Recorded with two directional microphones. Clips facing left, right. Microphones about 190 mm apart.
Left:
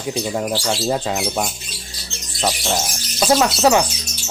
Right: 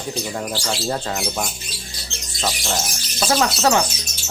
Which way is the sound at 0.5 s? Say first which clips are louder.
Left 3 dB; 15° left (ahead or behind).